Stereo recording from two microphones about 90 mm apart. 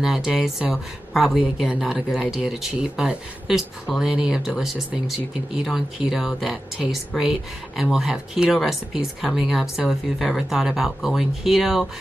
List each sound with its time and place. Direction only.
0.0 s speech: 5° right (ahead or behind)